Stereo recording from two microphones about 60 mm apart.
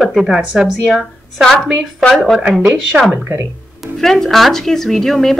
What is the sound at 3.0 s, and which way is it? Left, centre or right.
Speech, right.